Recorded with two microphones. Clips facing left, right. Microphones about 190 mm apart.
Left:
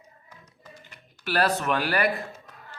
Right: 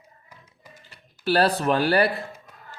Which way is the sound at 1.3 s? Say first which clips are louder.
Right 4 dB; 30° right (ahead or behind).